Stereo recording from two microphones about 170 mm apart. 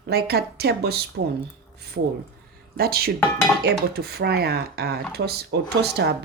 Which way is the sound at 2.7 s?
65° right (ahead or behind).